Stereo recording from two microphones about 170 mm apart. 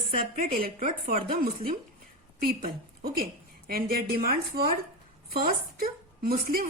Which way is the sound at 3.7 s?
60° right (ahead or behind).